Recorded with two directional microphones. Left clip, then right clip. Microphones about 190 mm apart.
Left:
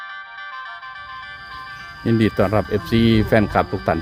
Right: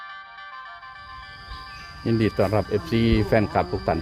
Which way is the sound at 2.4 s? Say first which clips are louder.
Left 3 dB; 40° left (ahead or behind).